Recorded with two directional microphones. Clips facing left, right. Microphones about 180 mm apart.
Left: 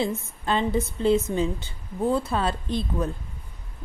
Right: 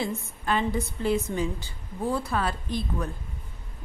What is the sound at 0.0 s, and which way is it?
A woman's voice, 25° left (ahead or behind).